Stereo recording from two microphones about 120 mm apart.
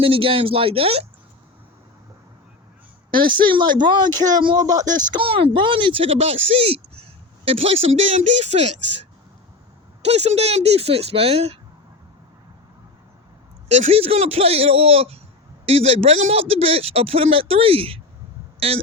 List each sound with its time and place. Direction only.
0.0 s speech: 50° right (ahead or behind)
3.1 s speech: 40° right (ahead or behind)
5.1 s speech: 50° right (ahead or behind); by 8.7 s 65° right (ahead or behind)
10.0 s speech: 60° right (ahead or behind)
13.7 s speech: 70° right (ahead or behind); by 18.8 s 50° right (ahead or behind)